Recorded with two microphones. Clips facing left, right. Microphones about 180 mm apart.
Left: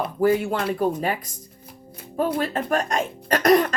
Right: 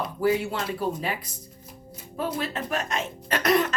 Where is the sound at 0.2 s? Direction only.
50° left (ahead or behind).